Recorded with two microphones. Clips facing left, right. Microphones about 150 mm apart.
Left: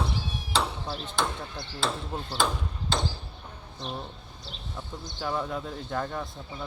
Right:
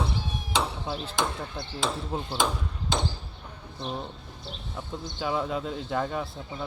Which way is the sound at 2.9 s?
15° right (ahead or behind).